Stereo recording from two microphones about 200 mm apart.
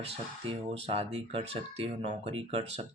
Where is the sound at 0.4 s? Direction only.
30° right (ahead or behind).